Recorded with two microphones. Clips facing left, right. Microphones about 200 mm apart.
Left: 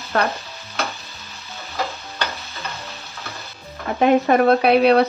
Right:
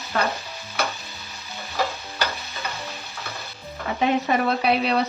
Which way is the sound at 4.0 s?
55° left (ahead or behind).